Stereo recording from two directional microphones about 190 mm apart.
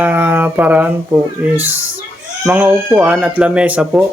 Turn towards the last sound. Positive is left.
turn(degrees=-5)  # may be behind; listen again after turning